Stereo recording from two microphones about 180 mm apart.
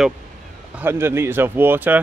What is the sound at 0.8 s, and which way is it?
Speech, 15° right (ahead or behind).